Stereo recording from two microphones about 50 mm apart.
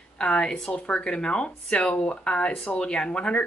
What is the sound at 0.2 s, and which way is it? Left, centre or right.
A woman's voice, centre.